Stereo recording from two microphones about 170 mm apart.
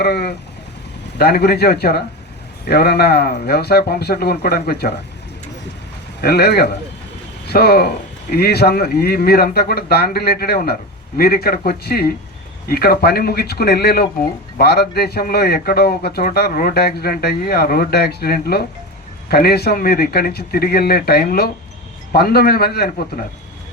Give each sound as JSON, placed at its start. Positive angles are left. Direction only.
{"t": 0.0, "sound": "a man's voice", "side_deg": 75}
{"t": 6.2, "sound": "a man's voice", "side_deg": 70}